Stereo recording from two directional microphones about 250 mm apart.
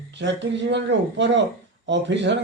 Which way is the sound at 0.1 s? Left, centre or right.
Right.